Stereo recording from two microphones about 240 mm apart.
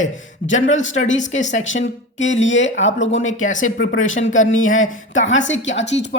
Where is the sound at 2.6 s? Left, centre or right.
Left.